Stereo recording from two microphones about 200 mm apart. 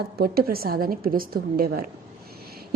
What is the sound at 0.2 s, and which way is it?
A woman's voice, 50° right (ahead or behind).